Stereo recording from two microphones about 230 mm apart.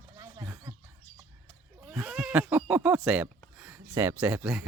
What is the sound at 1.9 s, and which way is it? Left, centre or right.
Speech, centre.